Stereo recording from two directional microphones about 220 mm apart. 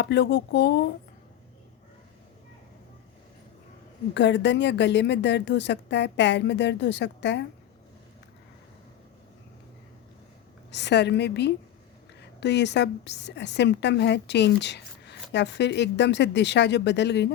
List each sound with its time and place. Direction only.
0.0 s a woman's voice: 50° left (ahead or behind)
4.1 s a woman's voice: 50° left (ahead or behind)
10.7 s a woman's voice: 50° left (ahead or behind)